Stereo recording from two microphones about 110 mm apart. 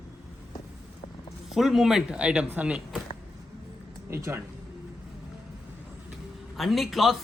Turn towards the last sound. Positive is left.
turn(degrees=0)  # may be behind; listen again after turning